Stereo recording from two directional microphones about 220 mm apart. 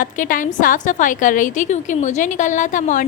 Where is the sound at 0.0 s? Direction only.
40° left (ahead or behind).